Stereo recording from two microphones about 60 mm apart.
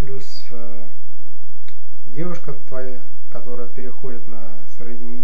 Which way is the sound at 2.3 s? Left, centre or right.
Centre.